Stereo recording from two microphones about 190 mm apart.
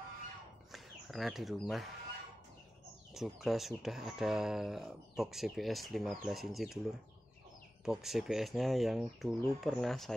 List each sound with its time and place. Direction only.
0.7 s bird: centre (ahead or behind)
3.2 s speech: centre (ahead or behind)